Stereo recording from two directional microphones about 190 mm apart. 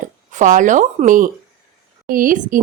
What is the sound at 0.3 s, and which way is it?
A woman's voice, 40° right (ahead or behind).